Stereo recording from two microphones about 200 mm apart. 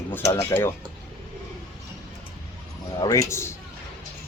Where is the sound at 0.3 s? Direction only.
15° left (ahead or behind).